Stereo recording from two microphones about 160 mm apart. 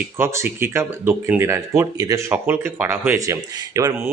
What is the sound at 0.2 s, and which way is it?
Speech, 15° right (ahead or behind).